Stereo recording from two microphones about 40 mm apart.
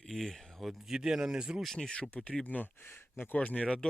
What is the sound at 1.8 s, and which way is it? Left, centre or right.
Speech, centre.